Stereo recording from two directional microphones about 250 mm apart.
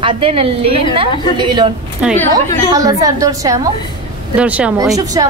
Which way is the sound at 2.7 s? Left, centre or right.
Centre.